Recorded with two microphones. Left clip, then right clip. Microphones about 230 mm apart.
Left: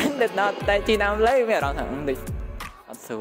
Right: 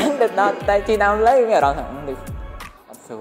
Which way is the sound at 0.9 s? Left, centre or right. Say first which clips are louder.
Right 5 dB; left.